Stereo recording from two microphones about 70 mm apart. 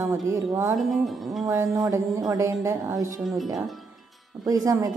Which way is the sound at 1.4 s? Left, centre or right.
Right.